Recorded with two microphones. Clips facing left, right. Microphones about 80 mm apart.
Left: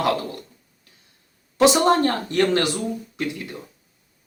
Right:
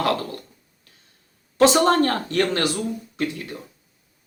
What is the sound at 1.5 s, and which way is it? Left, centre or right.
A woman's voice, centre.